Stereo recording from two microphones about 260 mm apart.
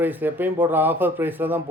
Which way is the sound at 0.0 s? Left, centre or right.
Centre.